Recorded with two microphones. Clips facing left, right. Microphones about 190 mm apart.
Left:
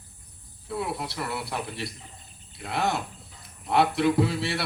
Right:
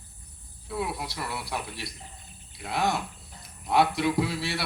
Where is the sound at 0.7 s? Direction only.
Centre (ahead or behind).